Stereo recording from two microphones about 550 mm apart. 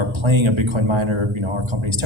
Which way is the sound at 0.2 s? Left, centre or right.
Right.